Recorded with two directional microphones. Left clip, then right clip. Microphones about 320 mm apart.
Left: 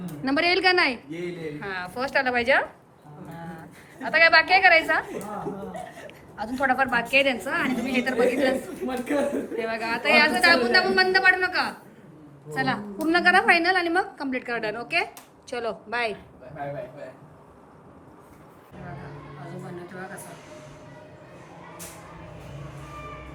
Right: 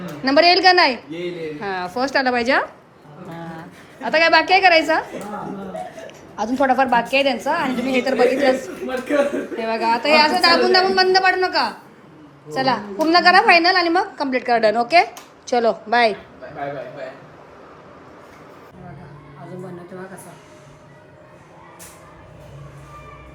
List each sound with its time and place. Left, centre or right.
0.2 s a woman's voice: centre
4.1 s a woman's voice: centre
6.1 s a woman's voice: centre
19.5 s music: centre